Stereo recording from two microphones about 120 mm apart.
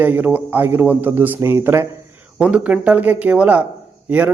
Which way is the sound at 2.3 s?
10° right (ahead or behind).